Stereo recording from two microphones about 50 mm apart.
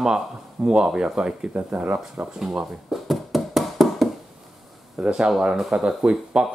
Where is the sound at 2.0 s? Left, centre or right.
Centre.